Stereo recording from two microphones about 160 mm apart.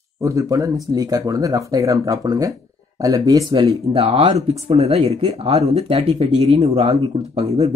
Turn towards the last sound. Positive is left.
turn(degrees=-40)  # may be behind; listen again after turning